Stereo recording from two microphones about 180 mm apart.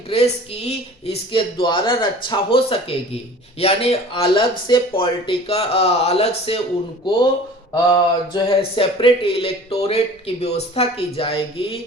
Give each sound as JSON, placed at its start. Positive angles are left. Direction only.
{"t": 0.1, "sound": "speech", "side_deg": 35}
{"t": 7.7, "sound": "speech", "side_deg": 25}